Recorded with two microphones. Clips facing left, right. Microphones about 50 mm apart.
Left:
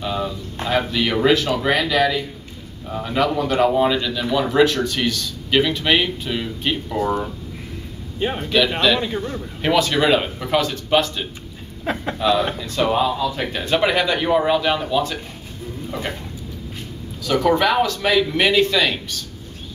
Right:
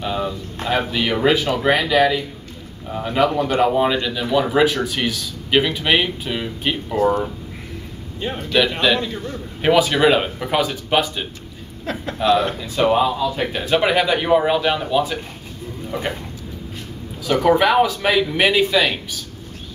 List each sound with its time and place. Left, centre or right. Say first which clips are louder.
0.0 s a man's voice: right 1 dB; centre
8.2 s speech: left 3 dB; centre
8.8 s a man's voice: even; centre
11.8 s a man's voice: left 2 dB; centre
12.2 s a man's voice: right 3 dB; centre
17.2 s a man's voice: right 2 dB; centre